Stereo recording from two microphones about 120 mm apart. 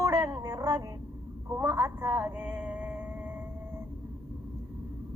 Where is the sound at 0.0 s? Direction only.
25° right (ahead or behind).